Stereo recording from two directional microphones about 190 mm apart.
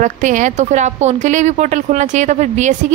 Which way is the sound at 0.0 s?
40° right (ahead or behind).